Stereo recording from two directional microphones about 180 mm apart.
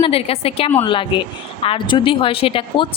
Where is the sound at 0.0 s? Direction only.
35° left (ahead or behind).